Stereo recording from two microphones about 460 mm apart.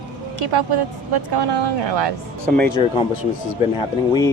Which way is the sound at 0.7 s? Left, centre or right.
Right.